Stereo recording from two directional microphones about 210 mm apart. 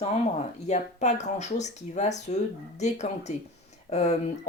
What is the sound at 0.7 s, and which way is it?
Speech, 35° left (ahead or behind).